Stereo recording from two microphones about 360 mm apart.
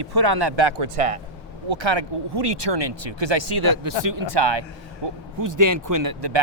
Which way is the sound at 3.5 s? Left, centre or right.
Right.